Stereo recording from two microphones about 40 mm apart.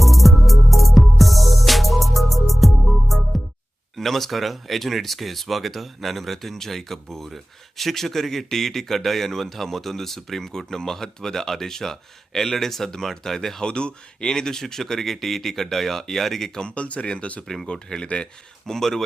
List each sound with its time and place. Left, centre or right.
0.0 s music: centre
3.9 s speech: centre
13.7 s speech: left; by 16.5 s centre
16.6 s speech: left
17.7 s speech: centre